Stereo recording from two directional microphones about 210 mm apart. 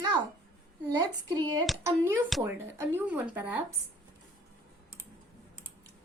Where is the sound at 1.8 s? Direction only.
15° right (ahead or behind).